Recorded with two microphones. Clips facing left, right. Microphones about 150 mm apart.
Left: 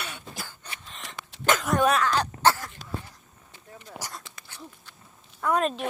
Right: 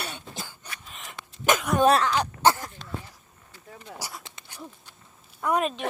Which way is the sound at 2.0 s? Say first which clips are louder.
Right 1 dB; 10° right (ahead or behind).